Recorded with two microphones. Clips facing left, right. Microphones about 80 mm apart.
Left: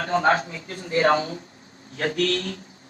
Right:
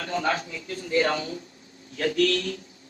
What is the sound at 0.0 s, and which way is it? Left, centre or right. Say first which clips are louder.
Speech: left 6 dB; left.